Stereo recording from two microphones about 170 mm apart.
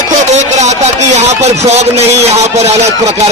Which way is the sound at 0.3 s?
45° right (ahead or behind).